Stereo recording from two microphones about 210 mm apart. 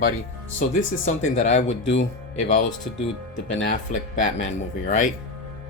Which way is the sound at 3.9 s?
35° left (ahead or behind).